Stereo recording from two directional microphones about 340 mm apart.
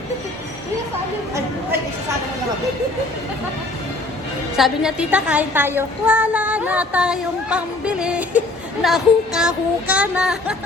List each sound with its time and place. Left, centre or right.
4.5 s a woman's voice: centre